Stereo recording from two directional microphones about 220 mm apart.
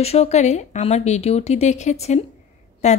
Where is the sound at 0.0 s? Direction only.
30° left (ahead or behind).